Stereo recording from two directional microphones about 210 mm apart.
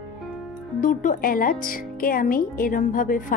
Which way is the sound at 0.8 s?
40° left (ahead or behind).